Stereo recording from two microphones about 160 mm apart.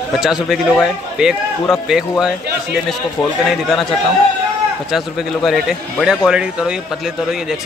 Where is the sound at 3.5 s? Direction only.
Centre (ahead or behind).